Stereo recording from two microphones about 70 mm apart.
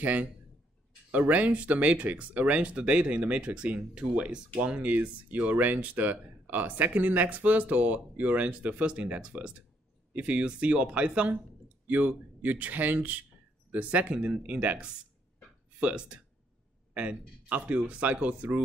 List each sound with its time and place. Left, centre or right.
0.0 s speech: right